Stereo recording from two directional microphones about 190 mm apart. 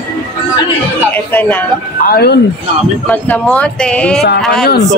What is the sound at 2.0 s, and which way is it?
Speech, 50° left (ahead or behind).